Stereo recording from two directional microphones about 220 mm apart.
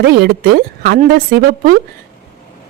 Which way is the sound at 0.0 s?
45° right (ahead or behind).